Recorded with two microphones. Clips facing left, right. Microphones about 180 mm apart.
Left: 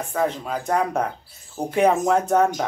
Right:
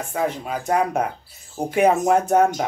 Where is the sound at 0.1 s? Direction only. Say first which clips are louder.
Even; 10° right (ahead or behind).